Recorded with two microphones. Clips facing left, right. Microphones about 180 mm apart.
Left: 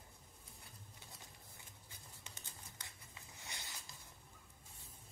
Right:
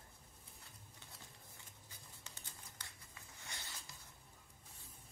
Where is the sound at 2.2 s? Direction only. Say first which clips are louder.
Left 1 dB; 20° left (ahead or behind).